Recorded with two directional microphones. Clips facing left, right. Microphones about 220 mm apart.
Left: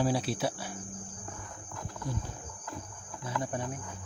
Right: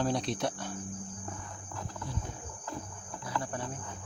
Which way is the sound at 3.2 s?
20° left (ahead or behind).